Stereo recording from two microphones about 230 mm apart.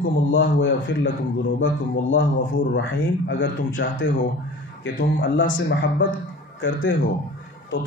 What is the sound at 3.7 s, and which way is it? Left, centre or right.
Speech, left.